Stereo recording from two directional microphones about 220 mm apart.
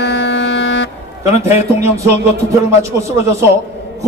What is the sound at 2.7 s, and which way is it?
Speech, 15° right (ahead or behind).